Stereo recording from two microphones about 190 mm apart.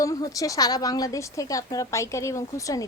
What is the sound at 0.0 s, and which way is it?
Speech, 15° left (ahead or behind).